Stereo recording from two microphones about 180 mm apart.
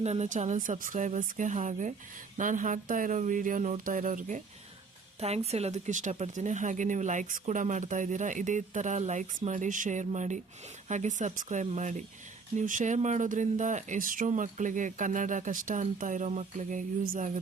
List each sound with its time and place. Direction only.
0.0 s speech: 40° right (ahead or behind)